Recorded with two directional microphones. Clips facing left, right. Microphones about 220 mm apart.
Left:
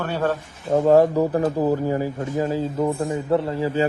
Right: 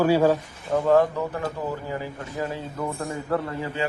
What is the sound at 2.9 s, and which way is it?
Speech, 20° left (ahead or behind).